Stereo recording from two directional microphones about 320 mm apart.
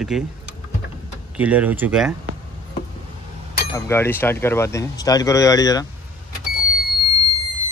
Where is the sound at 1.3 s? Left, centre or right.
Centre.